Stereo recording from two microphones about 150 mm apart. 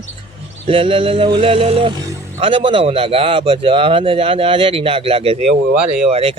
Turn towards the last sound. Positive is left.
turn(degrees=-40)  # may be behind; listen again after turning